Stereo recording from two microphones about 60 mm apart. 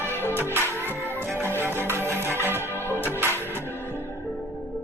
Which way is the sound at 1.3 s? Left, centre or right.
Right.